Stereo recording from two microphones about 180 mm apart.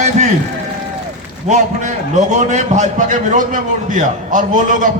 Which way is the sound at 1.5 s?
40° right (ahead or behind).